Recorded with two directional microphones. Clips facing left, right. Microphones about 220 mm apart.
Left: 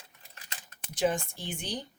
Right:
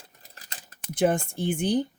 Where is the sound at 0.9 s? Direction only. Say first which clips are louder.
Right 5 dB; 55° right (ahead or behind).